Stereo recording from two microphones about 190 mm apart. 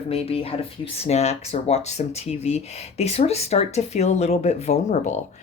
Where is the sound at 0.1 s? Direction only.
30° left (ahead or behind).